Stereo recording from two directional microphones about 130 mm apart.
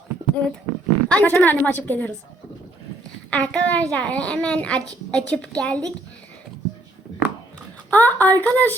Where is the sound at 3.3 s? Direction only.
10° left (ahead or behind).